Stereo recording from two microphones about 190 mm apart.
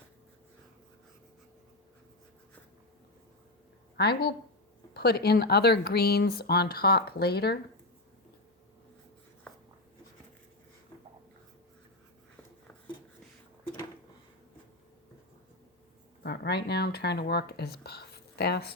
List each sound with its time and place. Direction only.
3.9 s speech: 55° left (ahead or behind)
16.2 s speech: 60° left (ahead or behind)